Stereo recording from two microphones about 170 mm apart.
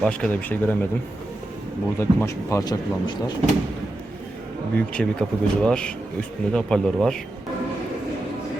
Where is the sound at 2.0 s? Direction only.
15° left (ahead or behind).